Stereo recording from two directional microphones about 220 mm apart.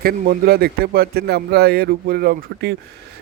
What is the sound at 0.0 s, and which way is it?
A man's voice, 40° right (ahead or behind).